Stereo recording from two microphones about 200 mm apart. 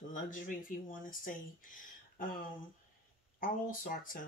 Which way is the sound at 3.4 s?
45° left (ahead or behind).